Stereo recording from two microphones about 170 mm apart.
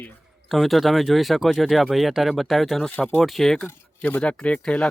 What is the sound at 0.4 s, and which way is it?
Speech, centre (ahead or behind).